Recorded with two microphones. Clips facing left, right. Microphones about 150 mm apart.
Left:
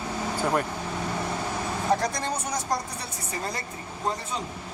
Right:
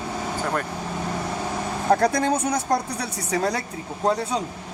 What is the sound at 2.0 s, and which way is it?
A woman's voice, 55° right (ahead or behind).